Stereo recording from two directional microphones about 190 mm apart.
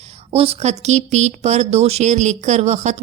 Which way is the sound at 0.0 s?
30° right (ahead or behind).